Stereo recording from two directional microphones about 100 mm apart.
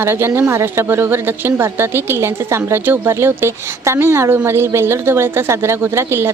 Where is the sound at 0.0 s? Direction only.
25° right (ahead or behind).